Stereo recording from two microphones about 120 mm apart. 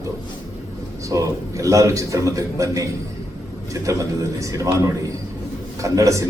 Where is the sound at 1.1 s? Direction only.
25° right (ahead or behind).